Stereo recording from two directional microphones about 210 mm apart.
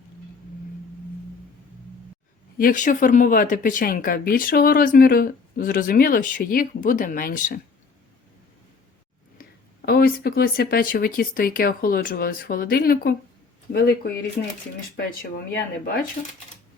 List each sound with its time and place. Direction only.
2.6 s speech: 40° left (ahead or behind)
9.4 s speech: 45° left (ahead or behind)